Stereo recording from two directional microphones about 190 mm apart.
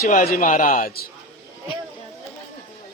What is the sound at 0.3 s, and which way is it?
Speech, 45° left (ahead or behind).